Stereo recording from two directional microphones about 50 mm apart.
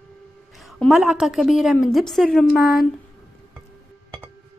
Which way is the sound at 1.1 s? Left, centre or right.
Centre.